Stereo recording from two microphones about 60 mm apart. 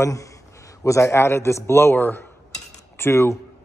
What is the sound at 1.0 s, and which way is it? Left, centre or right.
A man's voice, left.